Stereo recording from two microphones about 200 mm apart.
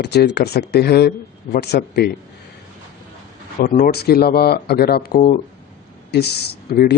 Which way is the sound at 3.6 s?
45° left (ahead or behind).